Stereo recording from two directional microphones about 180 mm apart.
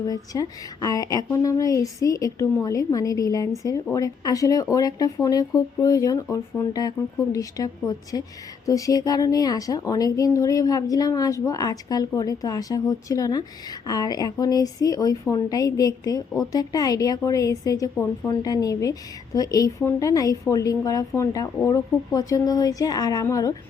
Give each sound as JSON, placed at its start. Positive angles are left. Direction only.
{"t": 0.1, "sound": "a woman's voice", "side_deg": 20}